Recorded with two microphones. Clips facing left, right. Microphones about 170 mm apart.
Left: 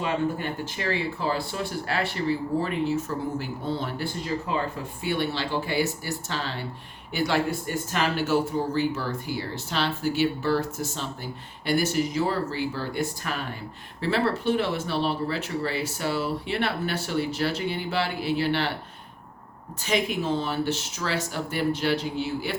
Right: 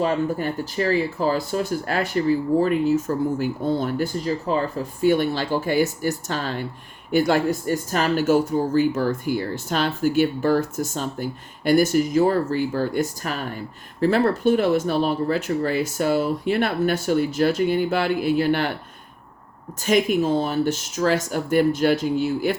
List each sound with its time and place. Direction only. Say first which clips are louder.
0.0 s speech: right 5 dB; 40° right (ahead or behind)
19.8 s speech: right 7 dB; 45° right (ahead or behind)